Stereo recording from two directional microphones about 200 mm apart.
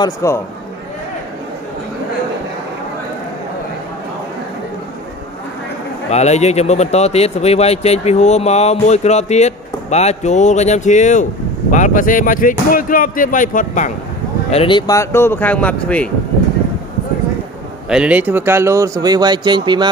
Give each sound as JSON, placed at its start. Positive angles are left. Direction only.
{"t": 0.0, "sound": "speech", "side_deg": 15}
{"t": 6.0, "sound": "a man's voice", "side_deg": 35}
{"t": 14.5, "sound": "speech", "side_deg": 25}
{"t": 17.8, "sound": "speech", "side_deg": -5}